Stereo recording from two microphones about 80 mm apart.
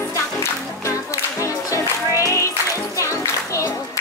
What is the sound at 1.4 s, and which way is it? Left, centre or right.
Music, left.